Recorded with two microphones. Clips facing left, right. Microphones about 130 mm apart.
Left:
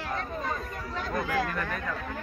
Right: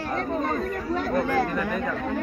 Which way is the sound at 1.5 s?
10° right (ahead or behind).